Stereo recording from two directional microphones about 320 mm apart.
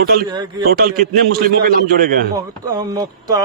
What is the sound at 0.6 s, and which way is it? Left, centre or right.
A man's voice, right.